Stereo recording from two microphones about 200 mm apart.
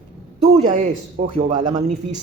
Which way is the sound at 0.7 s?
35° right (ahead or behind).